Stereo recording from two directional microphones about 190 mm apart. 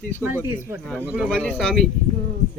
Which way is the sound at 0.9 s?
Centre (ahead or behind).